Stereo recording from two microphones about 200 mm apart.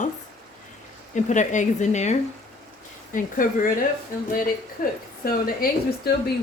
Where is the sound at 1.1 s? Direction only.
35° left (ahead or behind).